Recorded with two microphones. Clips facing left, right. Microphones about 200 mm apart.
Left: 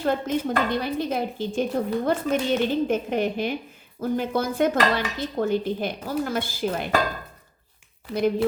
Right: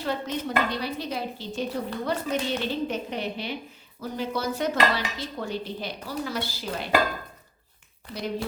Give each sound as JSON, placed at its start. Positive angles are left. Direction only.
{"t": 0.0, "sound": "speech", "side_deg": 50}